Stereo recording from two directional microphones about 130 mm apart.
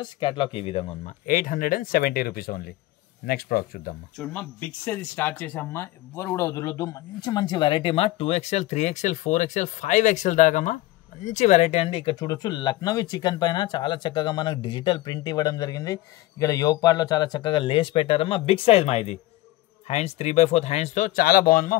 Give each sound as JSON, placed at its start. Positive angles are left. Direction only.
{"t": 0.0, "sound": "speech", "side_deg": 35}
{"t": 1.0, "sound": "speech", "side_deg": 90}
{"t": 4.2, "sound": "speech", "side_deg": 10}